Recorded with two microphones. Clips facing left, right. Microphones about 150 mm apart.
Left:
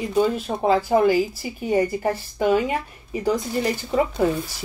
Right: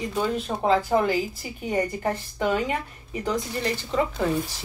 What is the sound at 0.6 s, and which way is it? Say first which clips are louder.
Speech: left 4 dB; 5° left (ahead or behind).